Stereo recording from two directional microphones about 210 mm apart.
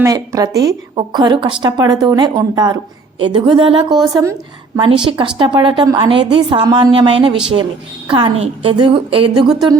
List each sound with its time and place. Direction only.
0.0 s a woman's voice: 15° right (ahead or behind)